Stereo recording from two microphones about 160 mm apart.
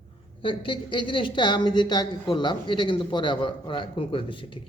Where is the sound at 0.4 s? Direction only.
30° left (ahead or behind).